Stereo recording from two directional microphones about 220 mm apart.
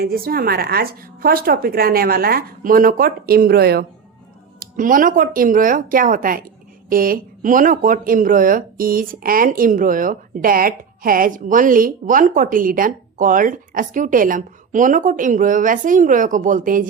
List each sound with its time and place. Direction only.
0.0 s a woman's voice: 45° right (ahead or behind)